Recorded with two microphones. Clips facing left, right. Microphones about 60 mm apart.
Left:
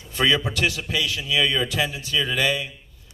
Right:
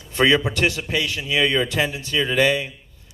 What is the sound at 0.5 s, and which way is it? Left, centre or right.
A man's voice, right.